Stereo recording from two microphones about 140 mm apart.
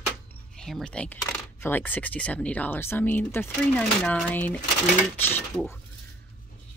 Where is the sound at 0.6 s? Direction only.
5° left (ahead or behind).